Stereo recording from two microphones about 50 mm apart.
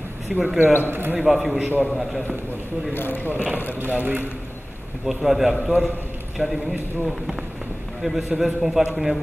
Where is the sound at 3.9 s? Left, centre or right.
Right.